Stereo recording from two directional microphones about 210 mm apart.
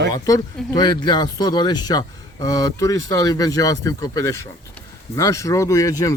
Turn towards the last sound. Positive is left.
turn(degrees=15)  # may be behind; listen again after turning